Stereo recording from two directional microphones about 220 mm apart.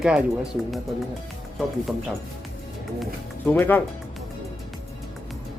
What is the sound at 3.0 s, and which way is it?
Speech, 5° left (ahead or behind).